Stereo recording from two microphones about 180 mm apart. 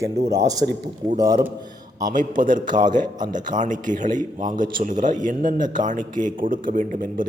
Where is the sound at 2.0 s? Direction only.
45° right (ahead or behind).